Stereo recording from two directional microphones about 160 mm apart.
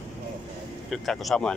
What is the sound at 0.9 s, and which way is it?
Speech, centre (ahead or behind).